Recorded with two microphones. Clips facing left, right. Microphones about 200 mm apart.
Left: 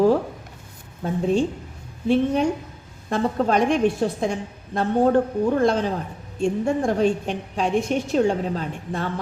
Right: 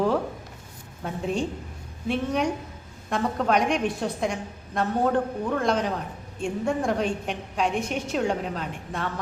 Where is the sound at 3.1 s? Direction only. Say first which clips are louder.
Left 3 dB; 30° left (ahead or behind).